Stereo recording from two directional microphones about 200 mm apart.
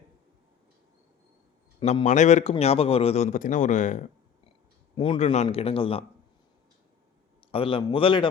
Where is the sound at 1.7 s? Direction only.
30° left (ahead or behind).